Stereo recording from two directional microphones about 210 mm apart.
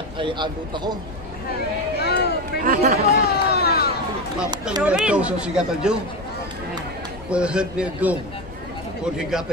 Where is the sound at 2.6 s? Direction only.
45° right (ahead or behind).